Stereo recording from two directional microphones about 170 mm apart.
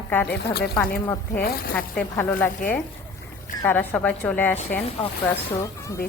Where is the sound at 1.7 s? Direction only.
10° left (ahead or behind).